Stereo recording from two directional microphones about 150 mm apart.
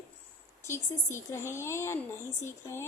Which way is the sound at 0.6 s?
20° left (ahead or behind).